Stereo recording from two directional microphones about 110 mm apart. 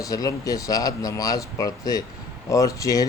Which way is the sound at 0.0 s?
30° left (ahead or behind).